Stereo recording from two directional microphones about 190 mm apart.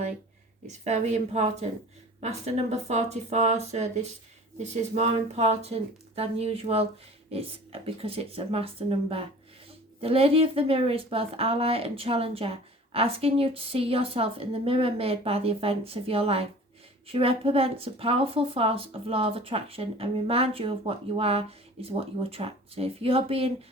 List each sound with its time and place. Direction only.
0.7 s a woman's voice: 35° right (ahead or behind)